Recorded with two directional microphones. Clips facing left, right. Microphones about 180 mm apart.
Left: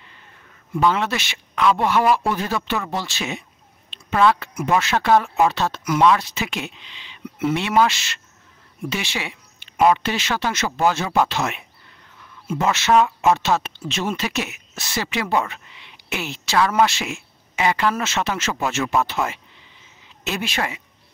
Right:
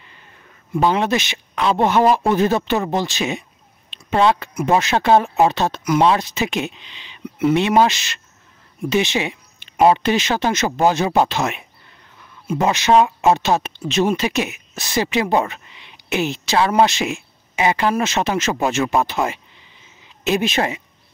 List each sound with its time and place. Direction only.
0.7 s speech: 20° right (ahead or behind)
12.9 s speech: 25° right (ahead or behind)